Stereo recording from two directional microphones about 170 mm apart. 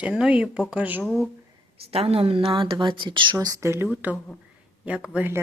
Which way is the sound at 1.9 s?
35° right (ahead or behind).